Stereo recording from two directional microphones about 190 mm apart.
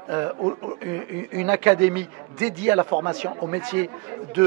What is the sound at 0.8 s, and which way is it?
Speech, 15° right (ahead or behind).